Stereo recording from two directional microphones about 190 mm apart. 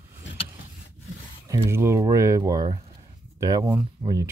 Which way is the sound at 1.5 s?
15° right (ahead or behind).